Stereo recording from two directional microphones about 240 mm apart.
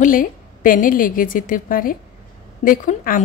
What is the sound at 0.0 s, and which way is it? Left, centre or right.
A woman's voice, left.